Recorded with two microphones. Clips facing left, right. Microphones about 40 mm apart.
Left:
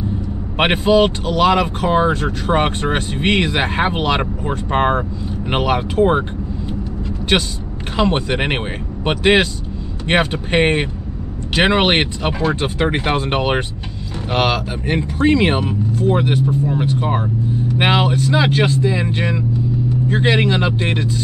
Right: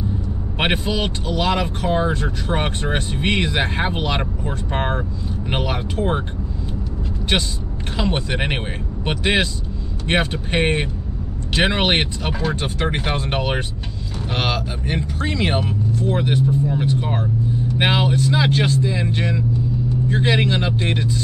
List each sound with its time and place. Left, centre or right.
0.6 s speech: left
7.9 s speech: left
14.9 s speech: left